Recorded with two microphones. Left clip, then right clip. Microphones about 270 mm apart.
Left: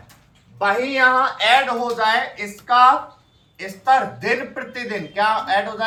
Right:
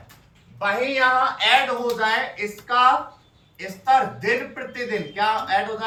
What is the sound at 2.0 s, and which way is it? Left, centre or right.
Speech, centre.